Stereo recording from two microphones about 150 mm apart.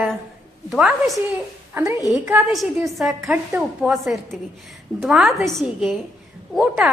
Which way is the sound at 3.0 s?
Centre (ahead or behind).